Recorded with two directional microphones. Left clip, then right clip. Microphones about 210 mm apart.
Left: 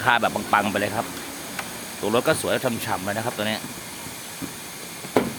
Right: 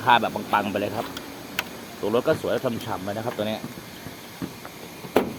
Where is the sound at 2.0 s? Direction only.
20° left (ahead or behind).